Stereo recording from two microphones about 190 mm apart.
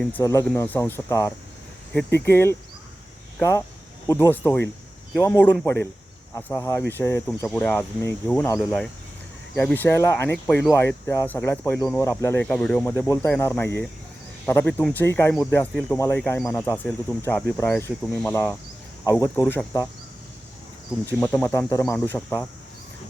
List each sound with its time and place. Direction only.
0.2 s speech: 15° left (ahead or behind)
7.3 s speech: 5° left (ahead or behind)
21.2 s speech: 15° left (ahead or behind)